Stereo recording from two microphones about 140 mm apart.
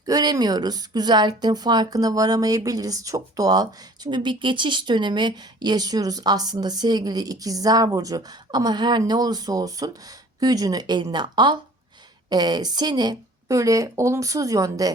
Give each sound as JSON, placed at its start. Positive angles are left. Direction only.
{"t": 0.0, "sound": "speech", "side_deg": -25}